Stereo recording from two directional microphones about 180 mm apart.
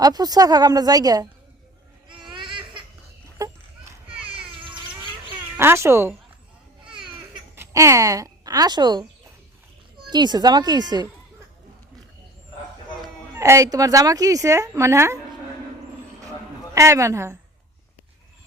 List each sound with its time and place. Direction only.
0.0 s speech: 20° right (ahead or behind)
2.3 s laughter: 25° right (ahead or behind)
4.4 s music: 30° right (ahead or behind)
5.5 s speech: 15° right (ahead or behind)
6.8 s a sound: 5° right (ahead or behind)
7.5 s speech: 15° right (ahead or behind)
10.1 s speech: 25° right (ahead or behind)
13.3 s speech: 15° right (ahead or behind)
16.7 s speech: 15° right (ahead or behind)